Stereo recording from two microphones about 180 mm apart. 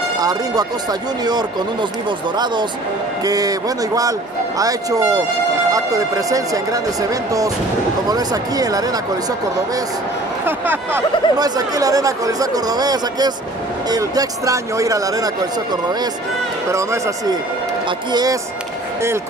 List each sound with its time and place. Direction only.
0.2 s speech: 20° right (ahead or behind)
10.4 s a man's voice: 10° right (ahead or behind)